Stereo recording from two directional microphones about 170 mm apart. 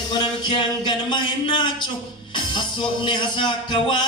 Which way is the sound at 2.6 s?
30° left (ahead or behind).